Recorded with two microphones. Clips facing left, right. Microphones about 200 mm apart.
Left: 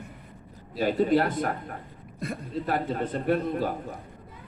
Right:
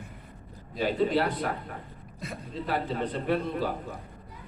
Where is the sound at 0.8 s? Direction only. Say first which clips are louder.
Left 3 dB; 45° left (ahead or behind).